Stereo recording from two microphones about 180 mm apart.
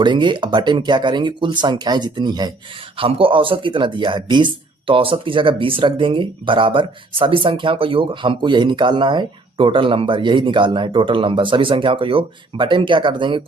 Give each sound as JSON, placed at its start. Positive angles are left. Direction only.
{"t": 0.0, "sound": "speech", "side_deg": -25}